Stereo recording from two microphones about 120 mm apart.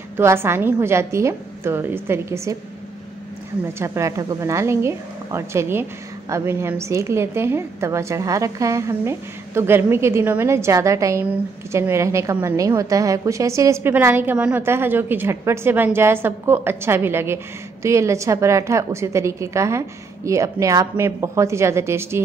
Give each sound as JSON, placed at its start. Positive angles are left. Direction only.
{"t": 0.2, "sound": "a woman's voice", "side_deg": -20}
{"t": 3.8, "sound": "a woman's voice", "side_deg": -25}